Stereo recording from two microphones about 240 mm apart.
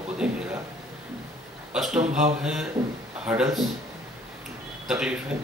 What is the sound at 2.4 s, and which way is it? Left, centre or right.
Speech, centre.